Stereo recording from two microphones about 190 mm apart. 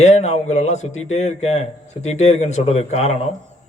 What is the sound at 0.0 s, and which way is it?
Speech, 35° left (ahead or behind).